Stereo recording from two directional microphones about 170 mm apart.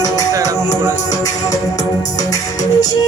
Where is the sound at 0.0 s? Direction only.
20° left (ahead or behind).